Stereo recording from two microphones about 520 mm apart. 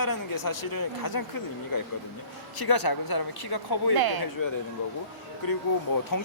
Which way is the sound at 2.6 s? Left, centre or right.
Left.